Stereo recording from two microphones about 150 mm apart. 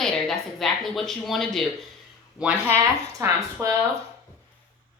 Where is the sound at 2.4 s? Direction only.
10° right (ahead or behind).